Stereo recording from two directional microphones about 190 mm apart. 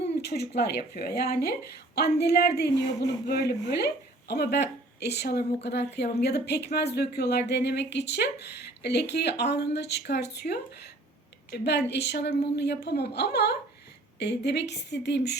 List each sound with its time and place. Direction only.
0.2 s speech: 55° left (ahead or behind)